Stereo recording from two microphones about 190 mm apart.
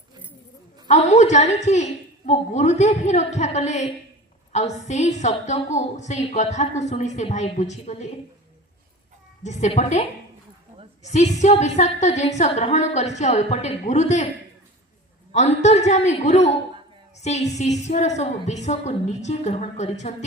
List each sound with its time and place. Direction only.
0.9 s a woman's voice: 35° left (ahead or behind)
9.4 s a woman's voice: 40° left (ahead or behind)
15.3 s a woman's voice: 35° left (ahead or behind)